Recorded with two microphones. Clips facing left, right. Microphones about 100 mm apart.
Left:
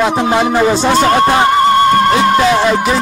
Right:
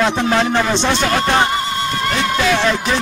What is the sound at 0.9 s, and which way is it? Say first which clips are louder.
Speech: left 6 dB; 40° left (ahead or behind).